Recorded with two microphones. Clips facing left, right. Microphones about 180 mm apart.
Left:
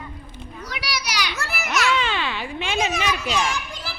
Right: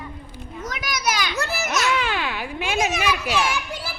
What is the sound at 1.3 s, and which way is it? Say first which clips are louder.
Speech: right 2 dB; 20° right (ahead or behind).